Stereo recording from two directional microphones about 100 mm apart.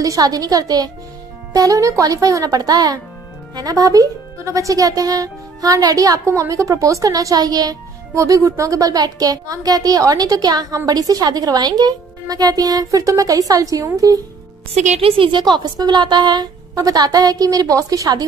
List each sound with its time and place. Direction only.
0.0 s speech: 35° right (ahead or behind)
14.7 s a woman's voice: 70° right (ahead or behind); by 18.2 s 35° right (ahead or behind)